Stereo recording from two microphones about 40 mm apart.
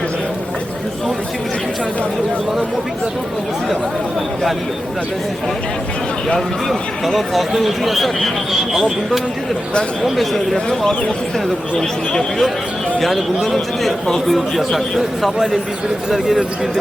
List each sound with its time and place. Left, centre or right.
6.7 s a man's voice: centre
10.0 s a man's voice: centre
10.7 s a man's voice: centre